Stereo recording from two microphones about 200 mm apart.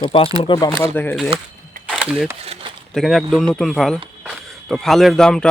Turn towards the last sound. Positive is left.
turn(degrees=5)  # may be behind; listen again after turning